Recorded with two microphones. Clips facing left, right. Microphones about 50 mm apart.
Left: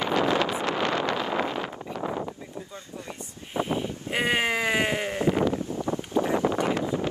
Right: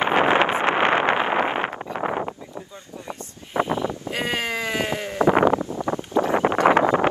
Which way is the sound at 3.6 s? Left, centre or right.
Right.